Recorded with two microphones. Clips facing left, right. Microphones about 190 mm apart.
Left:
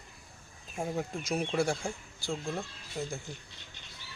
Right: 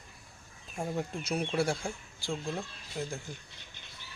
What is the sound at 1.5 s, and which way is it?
Speech, centre (ahead or behind).